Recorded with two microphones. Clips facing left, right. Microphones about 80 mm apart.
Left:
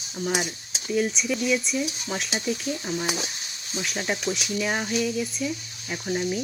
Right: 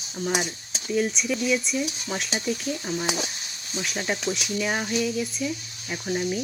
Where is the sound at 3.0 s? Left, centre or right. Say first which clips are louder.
Right 1 dB; right.